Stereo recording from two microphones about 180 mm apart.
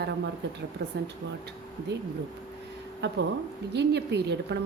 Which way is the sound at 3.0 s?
70° right (ahead or behind).